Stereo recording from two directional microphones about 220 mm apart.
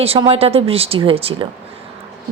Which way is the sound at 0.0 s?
25° right (ahead or behind).